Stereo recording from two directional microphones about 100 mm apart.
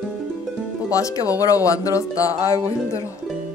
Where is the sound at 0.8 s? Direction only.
35° left (ahead or behind).